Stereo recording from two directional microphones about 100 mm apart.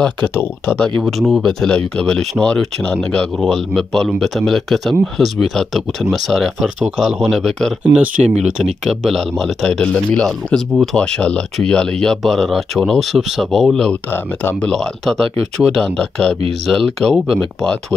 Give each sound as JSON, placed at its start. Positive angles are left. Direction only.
{"t": 0.7, "sound": "speech", "side_deg": 5}
{"t": 1.2, "sound": "a man's voice", "side_deg": -5}
{"t": 1.6, "sound": "a man's voice", "side_deg": 10}
{"t": 7.8, "sound": "speech", "side_deg": -15}
{"t": 8.8, "sound": "a man's voice", "side_deg": 0}
{"t": 14.1, "sound": "speech", "side_deg": 25}
{"t": 14.6, "sound": "a man's voice", "side_deg": 5}